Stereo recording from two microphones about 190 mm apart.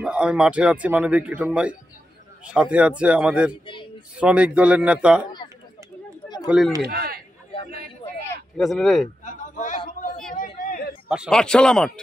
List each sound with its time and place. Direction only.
0.0 s speech: 5° right (ahead or behind)
6.4 s speech: 5° right (ahead or behind)
6.8 s a man's voice: 55° right (ahead or behind)
8.5 s speech: centre (ahead or behind)
9.2 s a sound: 40° left (ahead or behind)
10.3 s chatter: 45° left (ahead or behind)
11.1 s speech: centre (ahead or behind)